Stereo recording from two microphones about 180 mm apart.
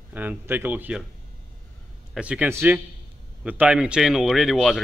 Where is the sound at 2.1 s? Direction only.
5° right (ahead or behind).